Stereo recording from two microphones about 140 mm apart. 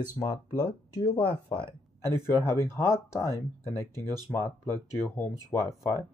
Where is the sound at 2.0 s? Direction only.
15° left (ahead or behind).